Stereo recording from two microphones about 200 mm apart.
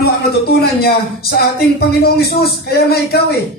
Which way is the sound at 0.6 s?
50° left (ahead or behind).